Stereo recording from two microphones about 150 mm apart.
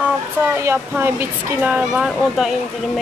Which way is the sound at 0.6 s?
15° right (ahead or behind).